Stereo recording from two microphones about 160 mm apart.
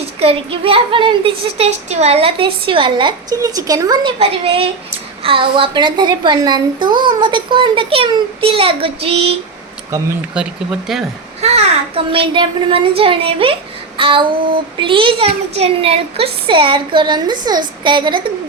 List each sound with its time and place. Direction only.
0.0 s speech: 40° right (ahead or behind)
4.2 s speech: 35° right (ahead or behind)
10.3 s speech: 5° right (ahead or behind)
11.3 s a child's voice: 40° right (ahead or behind)